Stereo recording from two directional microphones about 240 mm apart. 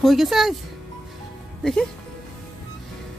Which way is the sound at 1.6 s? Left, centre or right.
Centre.